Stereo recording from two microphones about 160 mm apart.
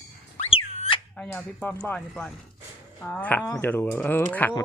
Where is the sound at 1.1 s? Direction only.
10° left (ahead or behind).